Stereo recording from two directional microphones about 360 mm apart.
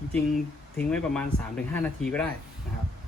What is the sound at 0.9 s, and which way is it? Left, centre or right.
Speech, centre.